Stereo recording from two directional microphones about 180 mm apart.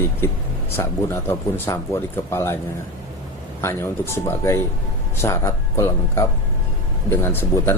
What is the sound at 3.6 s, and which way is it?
A man's voice, 15° left (ahead or behind).